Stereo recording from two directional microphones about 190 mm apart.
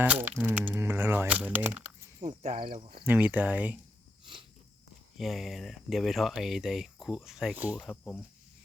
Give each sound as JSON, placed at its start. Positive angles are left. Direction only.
{"t": 0.0, "sound": "speech", "side_deg": -10}
{"t": 2.4, "sound": "speech", "side_deg": -40}
{"t": 3.1, "sound": "speech", "side_deg": -10}
{"t": 5.1, "sound": "speech", "side_deg": 0}